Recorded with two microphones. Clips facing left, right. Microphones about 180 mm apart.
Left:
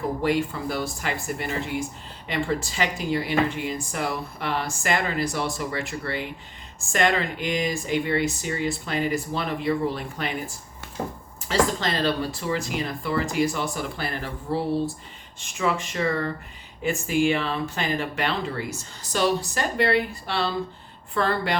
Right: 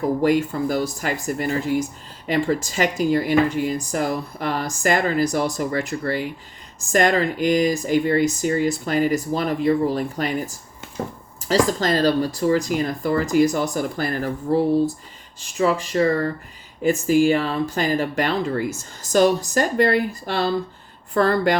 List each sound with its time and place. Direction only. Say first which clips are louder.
0.2 s speech: right 5 dB; 40° right (ahead or behind)
15.4 s speech: right 5 dB; 35° right (ahead or behind)